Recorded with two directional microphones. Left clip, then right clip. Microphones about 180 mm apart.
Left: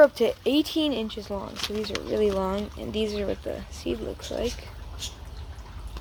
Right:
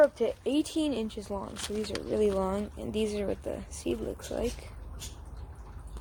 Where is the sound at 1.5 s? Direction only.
5° left (ahead or behind).